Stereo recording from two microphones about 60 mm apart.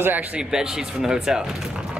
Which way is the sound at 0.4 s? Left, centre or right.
Centre.